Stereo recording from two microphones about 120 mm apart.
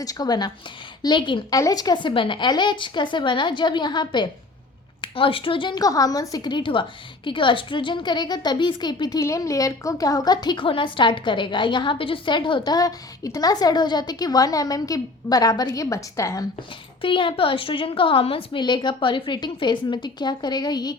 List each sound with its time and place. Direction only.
0.0 s a woman's voice: 30° left (ahead or behind)
17.0 s a woman's voice: 45° left (ahead or behind)